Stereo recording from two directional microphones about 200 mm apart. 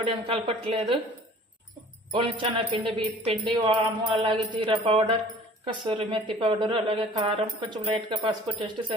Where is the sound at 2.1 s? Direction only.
25° right (ahead or behind).